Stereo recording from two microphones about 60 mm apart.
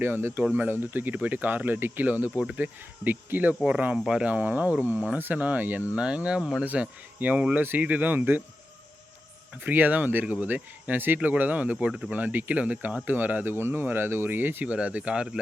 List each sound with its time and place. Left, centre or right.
0.0 s speech: right
3.9 s speech: centre
4.3 s speech: right
6.7 s speech: right
9.6 s speech: right
11.9 s speech: centre
12.1 s speech: right
14.7 s speech: right